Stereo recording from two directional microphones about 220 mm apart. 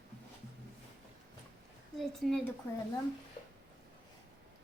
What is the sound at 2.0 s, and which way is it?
Speech, 5° left (ahead or behind).